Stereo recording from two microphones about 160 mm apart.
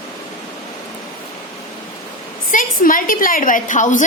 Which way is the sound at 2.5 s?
60° left (ahead or behind).